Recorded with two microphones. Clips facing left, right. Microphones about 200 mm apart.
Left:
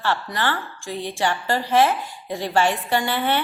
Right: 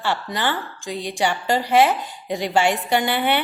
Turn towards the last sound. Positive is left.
turn(degrees=-15)  # may be behind; listen again after turning